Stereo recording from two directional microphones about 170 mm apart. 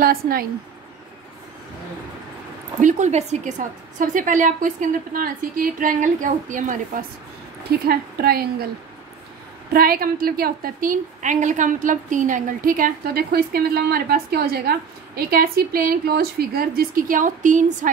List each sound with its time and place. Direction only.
0.0 s speech: 60° right (ahead or behind)
2.8 s a woman's voice: 45° right (ahead or behind)
7.9 s a woman's voice: 65° right (ahead or behind)
9.7 s a woman's voice: 60° right (ahead or behind)